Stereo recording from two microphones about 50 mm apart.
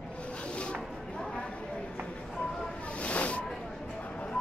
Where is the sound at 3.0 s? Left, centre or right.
Left.